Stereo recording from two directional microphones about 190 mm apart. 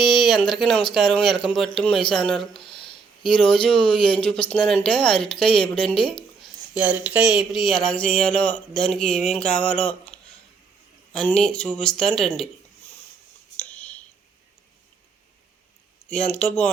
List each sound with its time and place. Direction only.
0.0 s speech: centre (ahead or behind)
2.6 s a sound: 25° left (ahead or behind)
3.6 s speech: 5° left (ahead or behind)
5.5 s speech: 25° left (ahead or behind)
6.4 s speech: 5° right (ahead or behind)
13.6 s a sound: 5° left (ahead or behind)
16.0 s speech: 5° left (ahead or behind)